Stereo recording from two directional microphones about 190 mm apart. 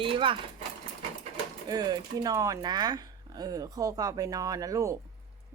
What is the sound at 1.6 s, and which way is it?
Speech, 20° right (ahead or behind).